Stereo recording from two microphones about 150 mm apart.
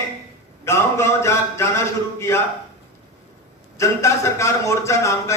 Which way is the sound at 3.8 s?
20° left (ahead or behind).